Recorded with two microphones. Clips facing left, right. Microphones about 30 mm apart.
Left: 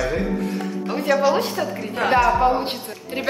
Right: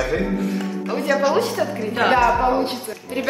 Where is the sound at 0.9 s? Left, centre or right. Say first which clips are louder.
Even; centre.